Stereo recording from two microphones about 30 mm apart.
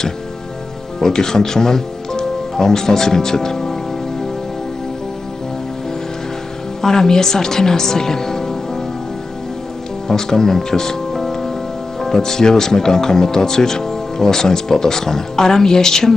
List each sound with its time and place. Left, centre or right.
1.0 s speech: centre
6.8 s speech: centre
10.0 s speech: centre